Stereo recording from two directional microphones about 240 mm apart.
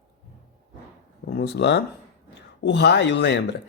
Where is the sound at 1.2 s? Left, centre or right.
Left.